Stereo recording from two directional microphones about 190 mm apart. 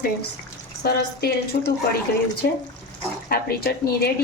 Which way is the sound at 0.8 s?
60° left (ahead or behind).